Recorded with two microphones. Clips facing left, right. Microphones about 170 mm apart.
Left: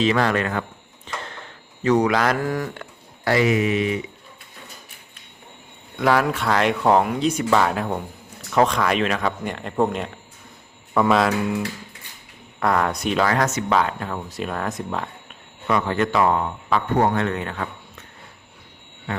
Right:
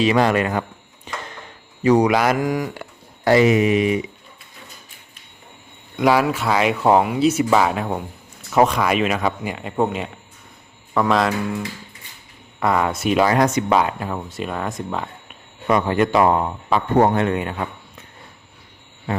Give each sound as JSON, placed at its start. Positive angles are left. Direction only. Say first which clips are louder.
{"t": 0.0, "sound": "speech", "louder": "right 3 dB", "side_deg": -15}
{"t": 1.1, "sound": "a sound", "louder": "right 1 dB", "side_deg": -10}
{"t": 1.8, "sound": "speech", "louder": "right 3 dB", "side_deg": -10}
{"t": 6.0, "sound": "speech", "louder": "right 2 dB", "side_deg": -10}
{"t": 15.6, "sound": "speech", "louder": "right 3 dB", "side_deg": -15}